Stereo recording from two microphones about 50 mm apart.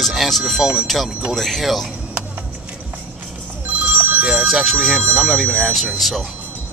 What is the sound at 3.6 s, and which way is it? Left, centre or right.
Telephone bell ringing, right.